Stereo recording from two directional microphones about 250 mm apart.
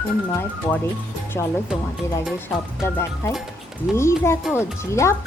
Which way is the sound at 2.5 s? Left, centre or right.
Centre.